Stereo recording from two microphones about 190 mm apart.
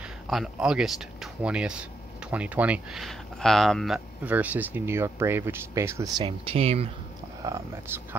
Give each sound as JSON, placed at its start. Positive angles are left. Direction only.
{"t": 0.0, "sound": "speech", "side_deg": 0}
{"t": 7.4, "sound": "speech", "side_deg": -15}